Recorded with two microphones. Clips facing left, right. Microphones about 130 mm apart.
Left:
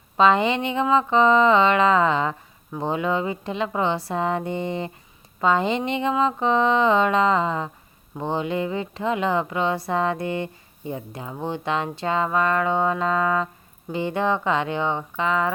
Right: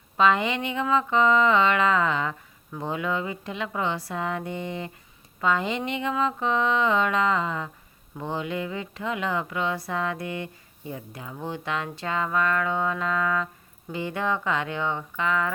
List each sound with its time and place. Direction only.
0.2 s speech: 25° left (ahead or behind)